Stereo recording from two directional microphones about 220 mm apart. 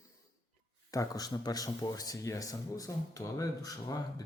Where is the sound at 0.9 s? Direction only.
15° left (ahead or behind).